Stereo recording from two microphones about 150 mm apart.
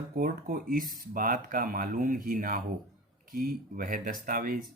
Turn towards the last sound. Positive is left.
turn(degrees=-70)  # may be behind; listen again after turning